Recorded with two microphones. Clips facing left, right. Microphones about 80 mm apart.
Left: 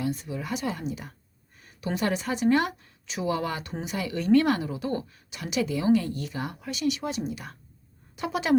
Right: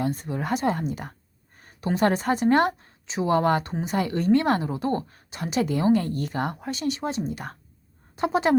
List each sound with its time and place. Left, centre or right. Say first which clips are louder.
0.0 s speech: right 3 dB; right
1.5 s a sound: right 4 dB; right
2.0 s a woman's voice: right 5 dB; right
3.2 s a woman's voice: right 7 dB; right